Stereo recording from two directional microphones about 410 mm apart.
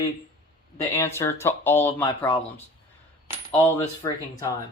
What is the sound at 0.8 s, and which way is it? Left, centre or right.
Speech, centre.